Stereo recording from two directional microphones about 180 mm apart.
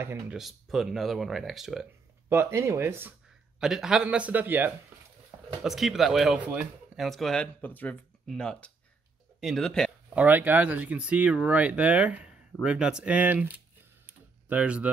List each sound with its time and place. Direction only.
0.0 s speech: 15° right (ahead or behind)
0.4 s speech: centre (ahead or behind)
2.2 s speech: 15° right (ahead or behind); by 9.9 s 5° left (ahead or behind)
10.0 s speech: 10° right (ahead or behind)
14.0 s computer keyboard: 10° right (ahead or behind)